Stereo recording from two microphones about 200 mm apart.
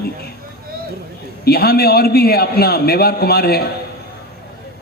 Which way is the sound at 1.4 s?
50° left (ahead or behind).